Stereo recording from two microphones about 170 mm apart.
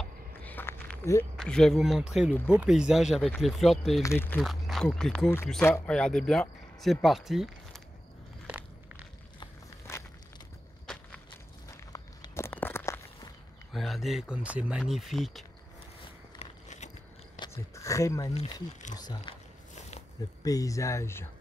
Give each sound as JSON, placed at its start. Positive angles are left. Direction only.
{"t": 0.0, "sound": "a sound", "side_deg": 10}
{"t": 1.3, "sound": "speech", "side_deg": 5}
{"t": 4.0, "sound": "speech", "side_deg": 15}
{"t": 4.4, "sound": "speech", "side_deg": 0}
{"t": 11.7, "sound": "walk", "side_deg": 20}
{"t": 13.7, "sound": "speech", "side_deg": 0}
{"t": 16.3, "sound": "biting", "side_deg": 45}
{"t": 17.4, "sound": "speech", "side_deg": 20}
{"t": 18.3, "sound": "speech", "side_deg": 40}
{"t": 18.9, "sound": "speech", "side_deg": 25}
{"t": 20.4, "sound": "speech", "side_deg": 20}